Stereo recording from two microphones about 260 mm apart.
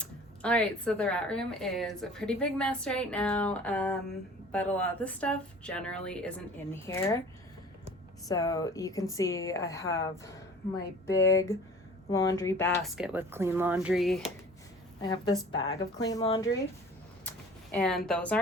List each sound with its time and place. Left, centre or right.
0.0 s speech: centre
8.3 s speech: centre
12.8 s speech: centre
15.0 s speech: centre
17.2 s a sound: centre
18.1 s speech: centre